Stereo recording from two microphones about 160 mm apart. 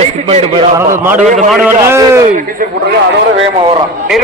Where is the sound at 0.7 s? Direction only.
15° right (ahead or behind).